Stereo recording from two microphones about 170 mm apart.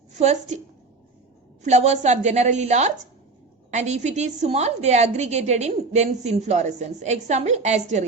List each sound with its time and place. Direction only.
0.2 s a woman's voice: 40° right (ahead or behind)
1.6 s a woman's voice: 40° right (ahead or behind)